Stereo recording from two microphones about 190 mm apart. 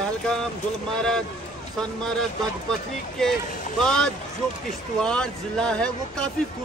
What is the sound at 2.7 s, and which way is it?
Speech, 5° left (ahead or behind).